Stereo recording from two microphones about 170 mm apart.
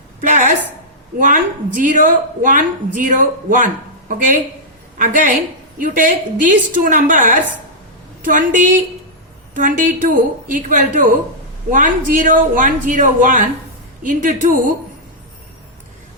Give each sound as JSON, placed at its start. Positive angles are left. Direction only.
{"t": 0.2, "sound": "a sound", "side_deg": -50}
{"t": 1.2, "sound": "a woman's voice", "side_deg": -50}
{"t": 4.9, "sound": "a woman's voice", "side_deg": -50}